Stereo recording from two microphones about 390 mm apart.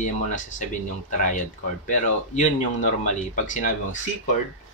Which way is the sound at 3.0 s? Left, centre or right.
Centre.